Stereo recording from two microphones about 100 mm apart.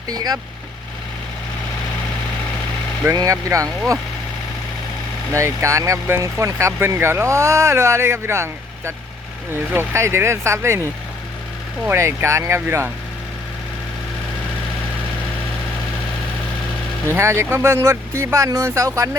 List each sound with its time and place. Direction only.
0.1 s speech: 40° right (ahead or behind)
3.2 s speech: 35° right (ahead or behind)
5.3 s speech: 30° right (ahead or behind)
11.9 s speech: 30° right (ahead or behind)
17.1 s speech: 25° right (ahead or behind)